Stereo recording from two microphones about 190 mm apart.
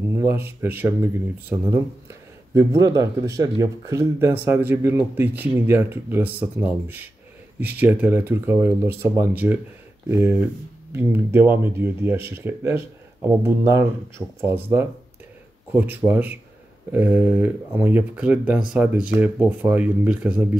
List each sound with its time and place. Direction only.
0.1 s speech: 15° right (ahead or behind)
15.7 s speech: 10° right (ahead or behind)